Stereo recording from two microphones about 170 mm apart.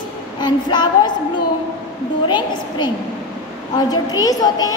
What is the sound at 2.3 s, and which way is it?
A woman's voice, 25° left (ahead or behind).